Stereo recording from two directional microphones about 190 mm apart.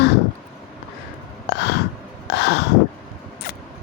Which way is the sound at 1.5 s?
60° left (ahead or behind).